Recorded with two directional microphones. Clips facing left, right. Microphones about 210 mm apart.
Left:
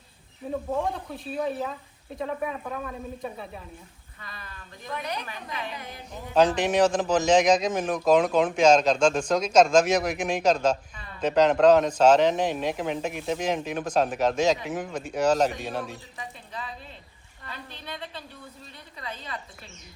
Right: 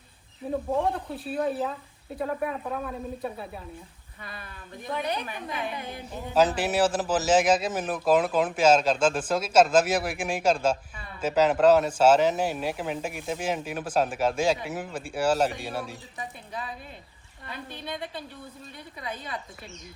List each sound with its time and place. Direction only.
1.1 s speech: 5° right (ahead or behind)
4.9 s a woman's voice: 30° right (ahead or behind)
6.3 s a man's voice: 5° right (ahead or behind)
18.9 s a man's voice: 10° right (ahead or behind)